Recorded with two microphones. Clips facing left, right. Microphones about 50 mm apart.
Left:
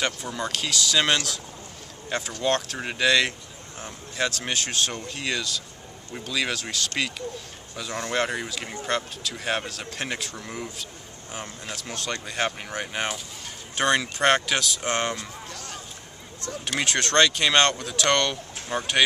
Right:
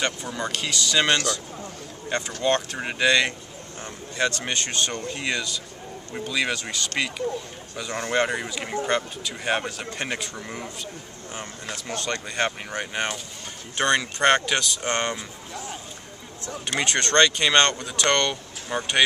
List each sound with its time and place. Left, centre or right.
0.0 s speech: centre
11.7 s speech: centre
15.1 s a sound: centre
16.6 s speech: centre